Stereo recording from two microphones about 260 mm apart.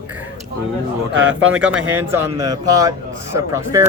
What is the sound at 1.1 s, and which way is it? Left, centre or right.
Speech, right.